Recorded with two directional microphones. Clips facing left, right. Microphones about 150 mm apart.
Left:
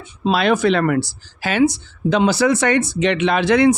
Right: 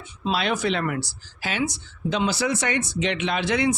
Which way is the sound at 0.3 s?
60° left (ahead or behind).